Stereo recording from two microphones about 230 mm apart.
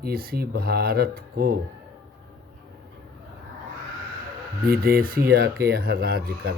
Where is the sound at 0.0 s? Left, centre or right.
Right.